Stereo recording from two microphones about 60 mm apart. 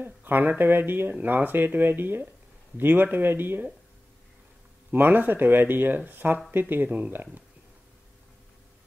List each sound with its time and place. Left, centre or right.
0.0 s speech: right
4.9 s speech: right